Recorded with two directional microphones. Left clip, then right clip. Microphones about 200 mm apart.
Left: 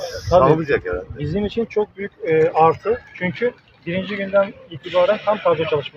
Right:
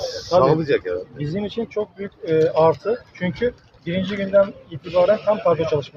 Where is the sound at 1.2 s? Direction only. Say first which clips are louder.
Left 3 dB; 60° left (ahead or behind).